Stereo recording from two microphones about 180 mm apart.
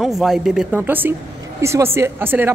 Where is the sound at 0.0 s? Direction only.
Centre (ahead or behind).